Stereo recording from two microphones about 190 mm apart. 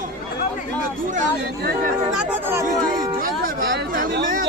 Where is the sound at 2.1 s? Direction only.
5° right (ahead or behind).